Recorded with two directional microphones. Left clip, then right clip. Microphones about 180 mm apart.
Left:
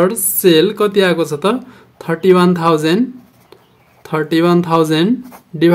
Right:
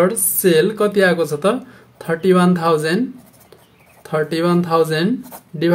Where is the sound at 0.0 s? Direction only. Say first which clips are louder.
Left 3 dB; 35° left (ahead or behind).